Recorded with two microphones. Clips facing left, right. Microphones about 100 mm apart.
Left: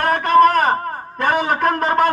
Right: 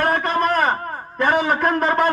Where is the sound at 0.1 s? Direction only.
65° left (ahead or behind).